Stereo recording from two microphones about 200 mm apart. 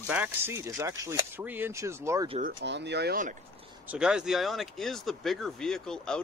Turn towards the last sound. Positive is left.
turn(degrees=5)  # may be behind; listen again after turning